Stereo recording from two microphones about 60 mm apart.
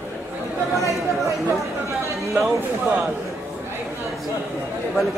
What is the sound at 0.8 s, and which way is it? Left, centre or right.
Chatter, right.